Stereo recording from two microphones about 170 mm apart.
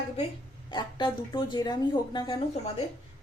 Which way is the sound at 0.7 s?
25° left (ahead or behind).